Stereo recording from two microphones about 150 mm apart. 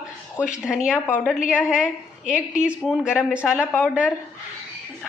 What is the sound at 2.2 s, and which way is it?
Speech, 60° left (ahead or behind).